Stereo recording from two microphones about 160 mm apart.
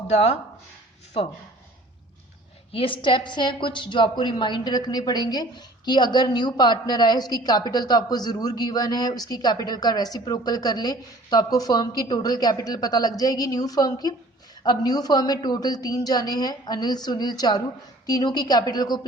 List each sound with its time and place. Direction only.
0.1 s speech: 40° left (ahead or behind)
2.7 s a woman's voice: 30° left (ahead or behind)